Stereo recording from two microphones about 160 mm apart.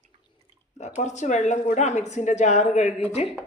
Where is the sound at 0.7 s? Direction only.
45° left (ahead or behind).